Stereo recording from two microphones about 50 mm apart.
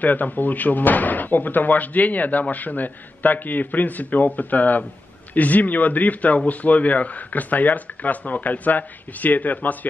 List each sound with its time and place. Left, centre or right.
0.0 s speech: left